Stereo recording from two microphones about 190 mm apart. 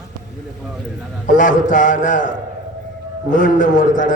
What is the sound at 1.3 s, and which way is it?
A man's voice, 45° left (ahead or behind).